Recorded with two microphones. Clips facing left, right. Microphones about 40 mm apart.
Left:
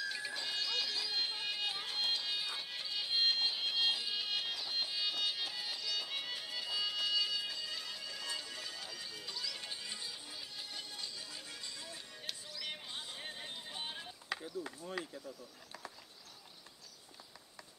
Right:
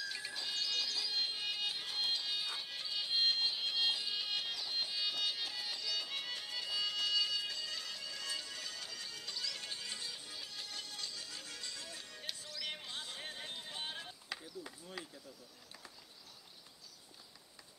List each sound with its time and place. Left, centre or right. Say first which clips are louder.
0.0 s bagpipes: left 3 dB; centre
12.2 s music: right 1 dB; centre
12.8 s a sound: even; centre
15.2 s speech: left 5 dB; left